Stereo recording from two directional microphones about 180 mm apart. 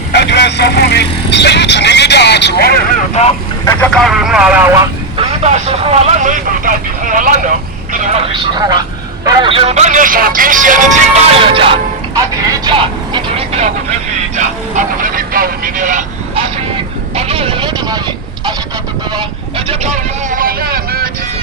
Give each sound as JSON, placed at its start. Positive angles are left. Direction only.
{"t": 0.1, "sound": "vehicle", "side_deg": 65}
{"t": 3.7, "sound": "speech", "side_deg": 10}
{"t": 4.8, "sound": "speech", "side_deg": -30}
{"t": 9.2, "sound": "speech", "side_deg": -25}
{"t": 11.3, "sound": "speech", "side_deg": -30}
{"t": 12.6, "sound": "vehicle", "side_deg": -25}
{"t": 14.3, "sound": "speech", "side_deg": -45}
{"t": 17.2, "sound": "vehicle", "side_deg": -30}
{"t": 19.1, "sound": "vehicle", "side_deg": -30}
{"t": 19.9, "sound": "vehicle", "side_deg": -50}